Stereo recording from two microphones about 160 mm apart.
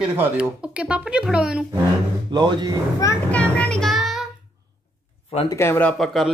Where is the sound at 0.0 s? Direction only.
10° right (ahead or behind).